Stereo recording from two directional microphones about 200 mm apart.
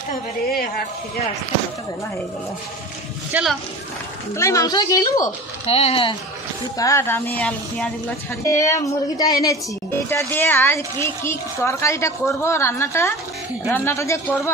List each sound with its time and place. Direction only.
3.3 s speech: 5° right (ahead or behind)
4.4 s a child's voice: 15° left (ahead or behind)
5.2 s a child's voice: 30° left (ahead or behind)
6.8 s a child's voice: 15° left (ahead or behind)